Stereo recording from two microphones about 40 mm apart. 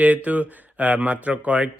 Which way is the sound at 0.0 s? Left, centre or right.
Right.